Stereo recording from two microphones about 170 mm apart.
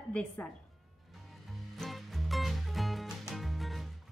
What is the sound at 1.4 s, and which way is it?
Music, centre (ahead or behind).